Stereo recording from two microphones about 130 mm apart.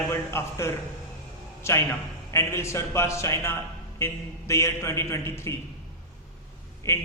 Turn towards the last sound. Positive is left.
turn(degrees=20)  # may be behind; listen again after turning